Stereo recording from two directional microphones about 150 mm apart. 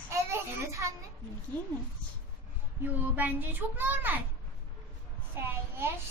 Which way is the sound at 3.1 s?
10° right (ahead or behind).